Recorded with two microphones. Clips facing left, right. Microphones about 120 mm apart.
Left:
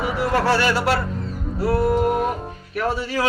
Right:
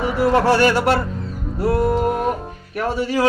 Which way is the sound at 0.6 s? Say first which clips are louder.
Right 4 dB; 45° right (ahead or behind).